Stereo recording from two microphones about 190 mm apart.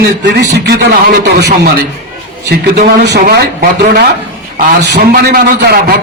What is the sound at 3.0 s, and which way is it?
A man's voice, 60° right (ahead or behind).